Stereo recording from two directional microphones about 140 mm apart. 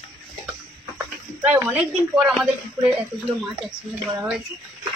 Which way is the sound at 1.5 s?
15° right (ahead or behind).